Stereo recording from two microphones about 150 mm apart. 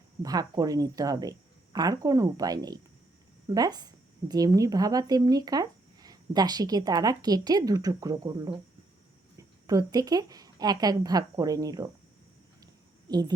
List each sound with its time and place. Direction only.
0.2 s a woman's voice: 25° right (ahead or behind)
9.6 s a woman's voice: 25° right (ahead or behind)
13.1 s speech: 25° right (ahead or behind)